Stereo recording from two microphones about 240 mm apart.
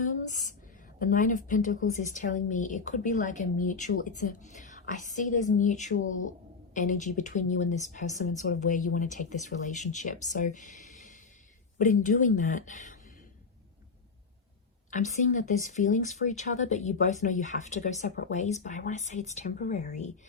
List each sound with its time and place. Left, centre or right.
0.9 s a woman's voice: left
6.0 s speech: left
6.7 s a woman's voice: left
14.8 s speech: left